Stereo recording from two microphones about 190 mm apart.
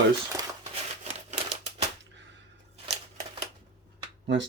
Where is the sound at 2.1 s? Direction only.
70° right (ahead or behind).